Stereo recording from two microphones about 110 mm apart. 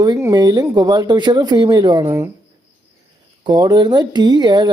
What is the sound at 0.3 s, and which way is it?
A woman's voice, 40° right (ahead or behind).